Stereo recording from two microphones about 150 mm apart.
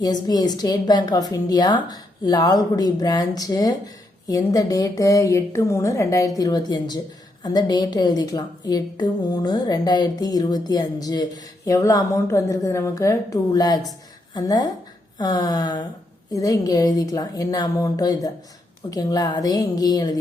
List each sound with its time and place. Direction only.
0.0 s a woman's voice: 25° left (ahead or behind)